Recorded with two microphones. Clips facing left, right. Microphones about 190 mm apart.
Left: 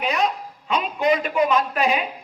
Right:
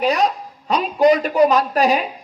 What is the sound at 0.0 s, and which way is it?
A woman's voice, 40° right (ahead or behind).